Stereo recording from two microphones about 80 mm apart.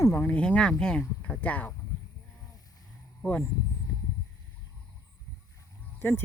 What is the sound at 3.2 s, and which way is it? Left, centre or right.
Speech, centre.